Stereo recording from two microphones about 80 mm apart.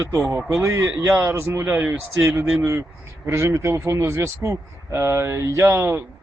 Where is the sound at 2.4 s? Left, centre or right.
Right.